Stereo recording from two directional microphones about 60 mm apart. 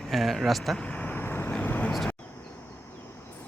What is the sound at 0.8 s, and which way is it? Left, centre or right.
Vehicle, left.